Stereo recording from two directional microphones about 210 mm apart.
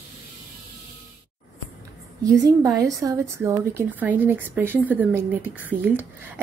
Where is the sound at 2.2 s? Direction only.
15° right (ahead or behind).